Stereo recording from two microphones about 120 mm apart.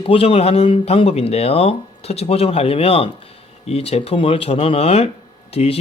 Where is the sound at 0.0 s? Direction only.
50° left (ahead or behind).